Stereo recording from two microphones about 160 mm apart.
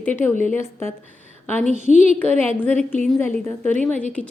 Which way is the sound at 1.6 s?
45° right (ahead or behind).